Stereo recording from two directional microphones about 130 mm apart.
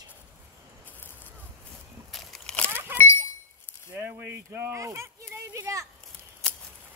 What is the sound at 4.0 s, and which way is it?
Speech, 15° right (ahead or behind).